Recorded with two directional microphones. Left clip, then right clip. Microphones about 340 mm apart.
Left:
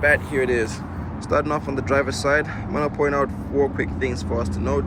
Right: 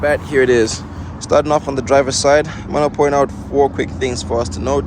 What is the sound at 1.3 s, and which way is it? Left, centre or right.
Speech, centre.